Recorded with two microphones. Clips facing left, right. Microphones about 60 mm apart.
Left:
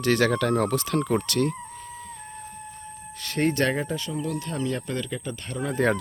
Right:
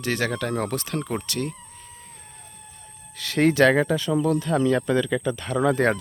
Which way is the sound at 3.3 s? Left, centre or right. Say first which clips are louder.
Right 6 dB; right.